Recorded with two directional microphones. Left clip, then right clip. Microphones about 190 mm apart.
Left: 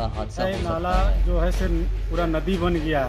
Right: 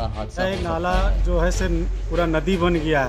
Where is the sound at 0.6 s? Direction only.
20° right (ahead or behind).